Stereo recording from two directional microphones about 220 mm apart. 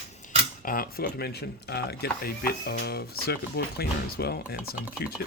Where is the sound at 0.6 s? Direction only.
40° left (ahead or behind).